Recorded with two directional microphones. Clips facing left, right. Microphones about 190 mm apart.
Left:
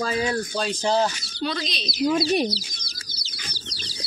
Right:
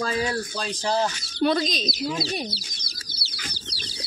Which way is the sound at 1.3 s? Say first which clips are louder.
Right 6 dB; 50° right (ahead or behind).